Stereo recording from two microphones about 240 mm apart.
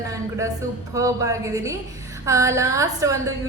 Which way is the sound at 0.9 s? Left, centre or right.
Centre.